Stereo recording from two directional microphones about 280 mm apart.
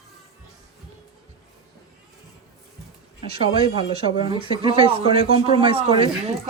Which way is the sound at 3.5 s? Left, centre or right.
Centre.